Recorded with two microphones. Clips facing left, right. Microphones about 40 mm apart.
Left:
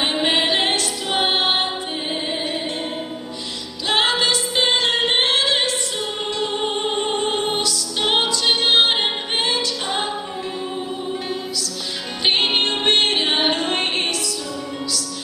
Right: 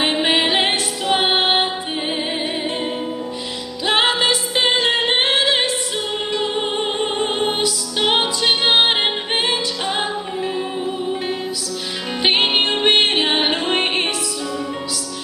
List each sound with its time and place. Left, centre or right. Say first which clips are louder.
0.0 s music: right 2 dB; centre
3.8 s music: right 2 dB; centre
7.2 s music: right 2 dB; centre
12.2 s music: right 2 dB; centre